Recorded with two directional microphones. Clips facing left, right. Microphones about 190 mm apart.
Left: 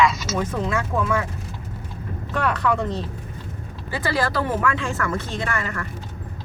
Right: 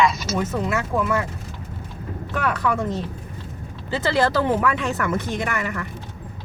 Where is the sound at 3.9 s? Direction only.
20° right (ahead or behind).